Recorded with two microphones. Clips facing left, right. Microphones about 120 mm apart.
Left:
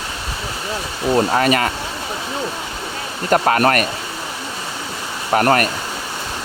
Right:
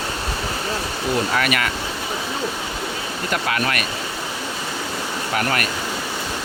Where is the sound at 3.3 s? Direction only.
40° left (ahead or behind).